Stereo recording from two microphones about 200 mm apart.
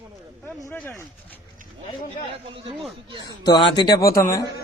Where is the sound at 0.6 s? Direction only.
5° left (ahead or behind).